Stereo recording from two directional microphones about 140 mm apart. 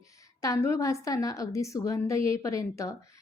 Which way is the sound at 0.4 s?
20° left (ahead or behind).